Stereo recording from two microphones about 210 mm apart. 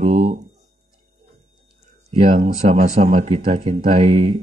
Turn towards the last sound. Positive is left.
turn(degrees=-30)  # may be behind; listen again after turning